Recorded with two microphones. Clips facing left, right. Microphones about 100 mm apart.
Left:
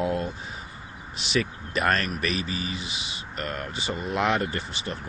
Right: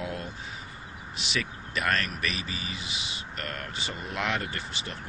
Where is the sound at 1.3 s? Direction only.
35° left (ahead or behind).